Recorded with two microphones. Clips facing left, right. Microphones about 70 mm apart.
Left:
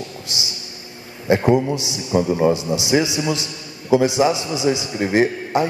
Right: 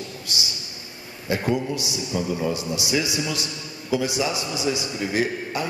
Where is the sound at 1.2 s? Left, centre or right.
Left.